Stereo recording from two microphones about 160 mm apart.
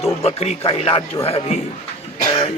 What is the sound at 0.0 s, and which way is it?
Speech, 40° left (ahead or behind).